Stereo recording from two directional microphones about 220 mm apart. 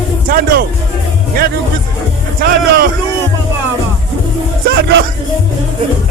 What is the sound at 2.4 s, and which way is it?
Speech, 45° right (ahead or behind).